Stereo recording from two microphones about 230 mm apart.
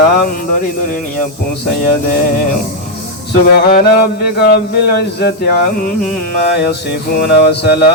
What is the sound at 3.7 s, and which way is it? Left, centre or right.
Music, left.